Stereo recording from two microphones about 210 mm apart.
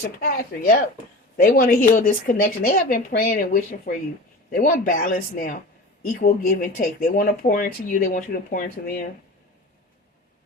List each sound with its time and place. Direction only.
0.0 s speech: 45° left (ahead or behind)